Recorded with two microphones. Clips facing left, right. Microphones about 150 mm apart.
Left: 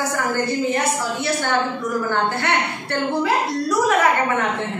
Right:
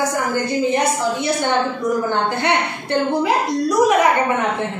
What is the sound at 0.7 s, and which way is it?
A woman's voice, 15° right (ahead or behind).